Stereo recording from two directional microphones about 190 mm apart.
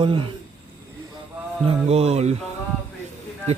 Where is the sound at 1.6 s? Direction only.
35° right (ahead or behind).